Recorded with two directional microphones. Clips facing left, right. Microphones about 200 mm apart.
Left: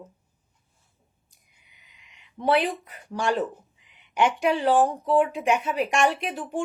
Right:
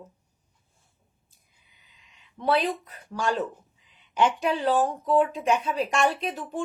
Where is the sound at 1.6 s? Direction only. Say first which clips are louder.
Left 2 dB; 80° left.